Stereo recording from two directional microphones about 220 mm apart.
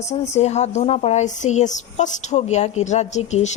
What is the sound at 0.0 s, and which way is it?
A woman's voice, 30° left (ahead or behind).